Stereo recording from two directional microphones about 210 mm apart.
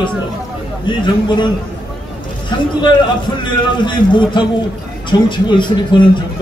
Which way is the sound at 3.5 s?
20° left (ahead or behind).